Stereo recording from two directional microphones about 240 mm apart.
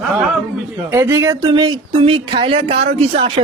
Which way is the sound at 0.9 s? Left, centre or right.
Centre.